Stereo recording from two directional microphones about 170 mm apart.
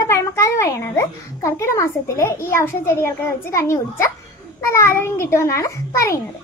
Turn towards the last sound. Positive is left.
turn(degrees=15)  # may be behind; listen again after turning